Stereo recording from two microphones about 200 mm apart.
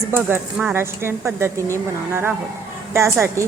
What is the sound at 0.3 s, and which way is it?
A woman's voice, 10° right (ahead or behind).